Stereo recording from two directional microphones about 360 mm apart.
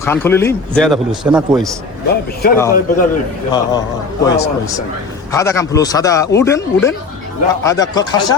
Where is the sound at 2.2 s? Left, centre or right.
Left.